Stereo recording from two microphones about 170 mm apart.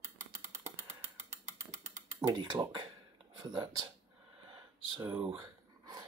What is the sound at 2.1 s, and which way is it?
Speech, 25° right (ahead or behind).